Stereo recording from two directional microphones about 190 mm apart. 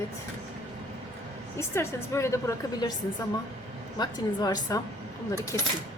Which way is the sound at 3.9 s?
20° left (ahead or behind).